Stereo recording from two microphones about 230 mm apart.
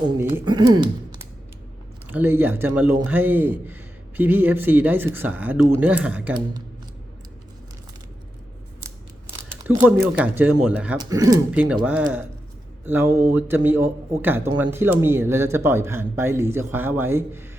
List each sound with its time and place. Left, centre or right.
0.2 s speech: centre
2.0 s speech: centre
9.6 s speech: centre